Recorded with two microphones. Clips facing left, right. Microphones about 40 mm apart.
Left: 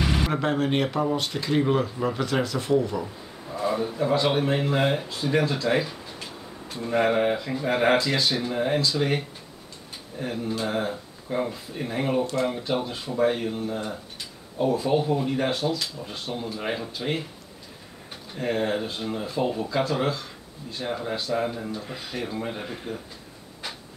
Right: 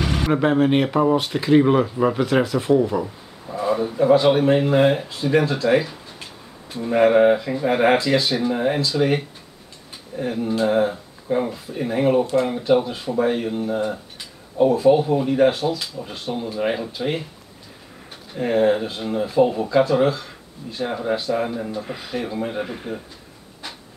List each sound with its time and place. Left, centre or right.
0.0 s a sound: centre
0.3 s speech: centre
18.3 s speech: centre